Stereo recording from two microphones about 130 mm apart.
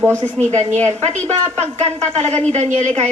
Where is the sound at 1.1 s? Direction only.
60° right (ahead or behind).